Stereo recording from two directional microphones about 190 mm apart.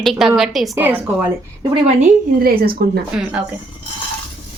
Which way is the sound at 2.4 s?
50° right (ahead or behind).